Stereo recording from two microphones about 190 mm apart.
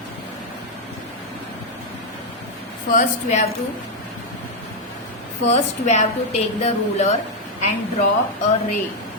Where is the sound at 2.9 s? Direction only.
40° left (ahead or behind).